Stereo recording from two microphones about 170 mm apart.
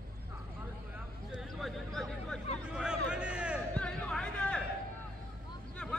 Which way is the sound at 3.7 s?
5° left (ahead or behind).